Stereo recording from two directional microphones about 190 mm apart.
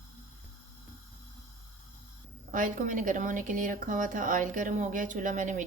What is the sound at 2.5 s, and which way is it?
A woman's voice, 45° right (ahead or behind).